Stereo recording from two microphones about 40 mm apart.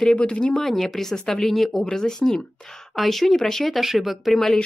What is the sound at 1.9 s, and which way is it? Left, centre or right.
Speech, centre.